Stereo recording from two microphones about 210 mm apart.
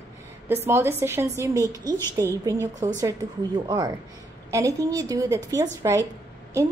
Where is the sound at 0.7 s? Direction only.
10° right (ahead or behind).